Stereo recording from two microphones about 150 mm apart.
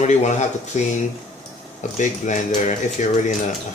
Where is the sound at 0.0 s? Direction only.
50° left (ahead or behind).